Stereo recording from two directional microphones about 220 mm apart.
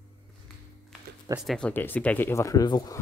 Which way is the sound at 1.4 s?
Centre (ahead or behind).